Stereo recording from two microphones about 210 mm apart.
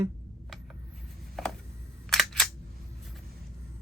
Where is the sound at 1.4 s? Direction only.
Centre (ahead or behind).